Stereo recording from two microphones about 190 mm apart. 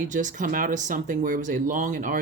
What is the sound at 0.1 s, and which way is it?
Speech, 40° right (ahead or behind).